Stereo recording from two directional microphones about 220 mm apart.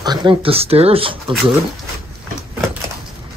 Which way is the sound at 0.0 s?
20° right (ahead or behind).